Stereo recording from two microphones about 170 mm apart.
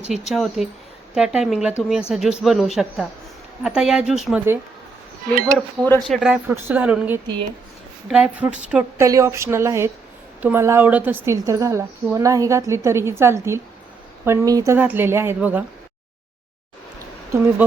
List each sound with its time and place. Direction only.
0.1 s speech: centre (ahead or behind)
5.5 s a woman's voice: 10° left (ahead or behind); by 9.0 s 5° right (ahead or behind)
9.0 s a woman's voice: 20° right (ahead or behind)
17.6 s a woman's voice: 10° right (ahead or behind)